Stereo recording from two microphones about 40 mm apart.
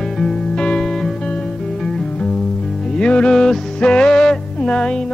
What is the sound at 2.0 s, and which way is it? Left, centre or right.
Music, left.